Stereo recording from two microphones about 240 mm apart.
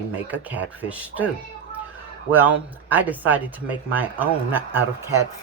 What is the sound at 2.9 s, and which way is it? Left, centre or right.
Speech, centre.